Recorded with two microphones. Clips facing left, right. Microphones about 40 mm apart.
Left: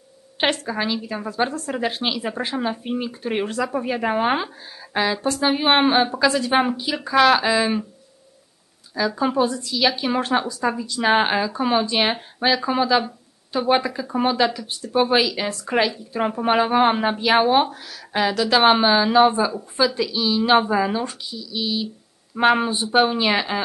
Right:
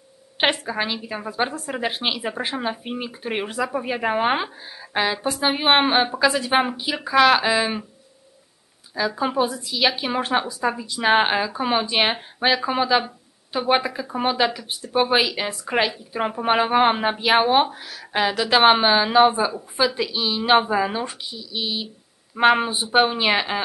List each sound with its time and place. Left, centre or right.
0.4 s a woman's voice: centre
8.9 s a woman's voice: centre